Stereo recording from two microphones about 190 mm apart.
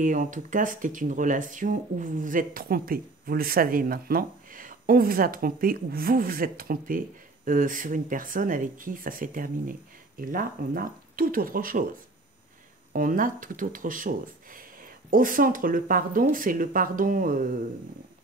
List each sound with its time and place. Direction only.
0.0 s speech: 45° right (ahead or behind)
12.9 s speech: 45° right (ahead or behind)